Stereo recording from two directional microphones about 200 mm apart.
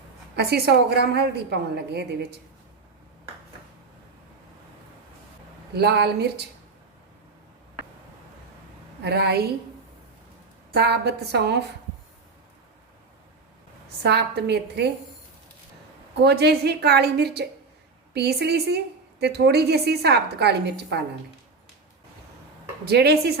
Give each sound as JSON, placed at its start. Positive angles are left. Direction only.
{"t": 0.3, "sound": "a woman's voice", "side_deg": -55}
{"t": 5.7, "sound": "a woman's voice", "side_deg": -55}
{"t": 9.0, "sound": "a woman's voice", "side_deg": -55}
{"t": 10.8, "sound": "a woman's voice", "side_deg": -55}
{"t": 14.0, "sound": "a woman's voice", "side_deg": -55}
{"t": 16.2, "sound": "a woman's voice", "side_deg": -55}
{"t": 22.9, "sound": "a woman's voice", "side_deg": -55}